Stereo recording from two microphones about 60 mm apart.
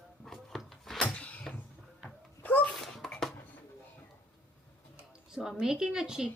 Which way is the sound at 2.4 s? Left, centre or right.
Left.